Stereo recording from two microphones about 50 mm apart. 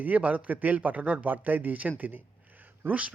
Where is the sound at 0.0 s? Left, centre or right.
Right.